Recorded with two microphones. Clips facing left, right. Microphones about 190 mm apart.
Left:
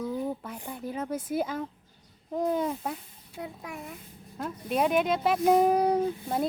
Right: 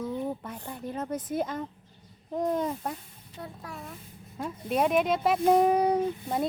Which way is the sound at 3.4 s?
15° left (ahead or behind).